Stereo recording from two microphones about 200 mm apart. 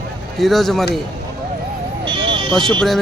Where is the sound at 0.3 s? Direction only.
Centre (ahead or behind).